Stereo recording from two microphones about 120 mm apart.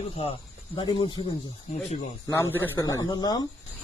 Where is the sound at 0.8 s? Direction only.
40° left (ahead or behind).